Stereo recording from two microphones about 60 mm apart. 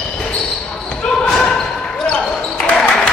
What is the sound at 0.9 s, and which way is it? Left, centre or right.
Basketball bounce, centre.